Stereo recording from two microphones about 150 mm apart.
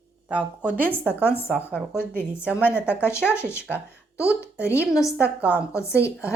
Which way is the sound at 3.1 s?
15° left (ahead or behind).